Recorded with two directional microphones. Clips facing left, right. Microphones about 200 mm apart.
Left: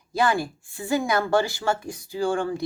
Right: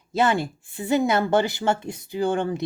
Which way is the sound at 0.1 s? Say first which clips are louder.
Right 1 dB; 25° right (ahead or behind).